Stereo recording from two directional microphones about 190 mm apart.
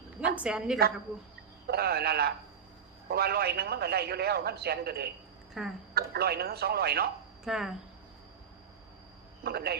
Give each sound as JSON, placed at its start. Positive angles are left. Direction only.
{"t": 0.3, "sound": "a woman's voice", "side_deg": -5}
{"t": 1.6, "sound": "a man's voice", "side_deg": -55}
{"t": 5.6, "sound": "a woman's voice", "side_deg": -5}
{"t": 5.9, "sound": "a man's voice", "side_deg": -55}
{"t": 7.4, "sound": "speech", "side_deg": -5}
{"t": 9.4, "sound": "a man's voice", "side_deg": -55}